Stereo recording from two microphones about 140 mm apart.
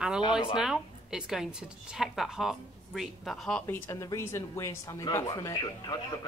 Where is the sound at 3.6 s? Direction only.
20° left (ahead or behind).